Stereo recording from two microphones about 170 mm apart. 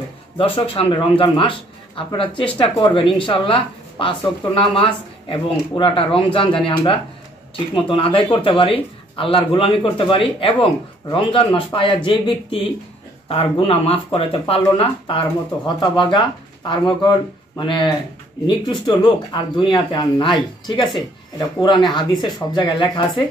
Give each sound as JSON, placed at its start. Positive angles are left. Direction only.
{"t": 0.4, "sound": "a man's voice", "side_deg": 35}